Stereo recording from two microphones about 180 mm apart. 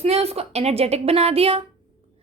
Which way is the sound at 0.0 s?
35° right (ahead or behind).